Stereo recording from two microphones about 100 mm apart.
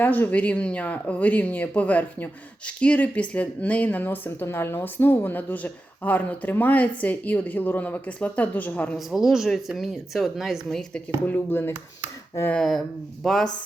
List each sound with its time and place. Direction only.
0.0 s speech: 20° left (ahead or behind)
9.0 s speech: 5° right (ahead or behind)
11.3 s speech: 20° left (ahead or behind)
12.5 s speech: 5° left (ahead or behind)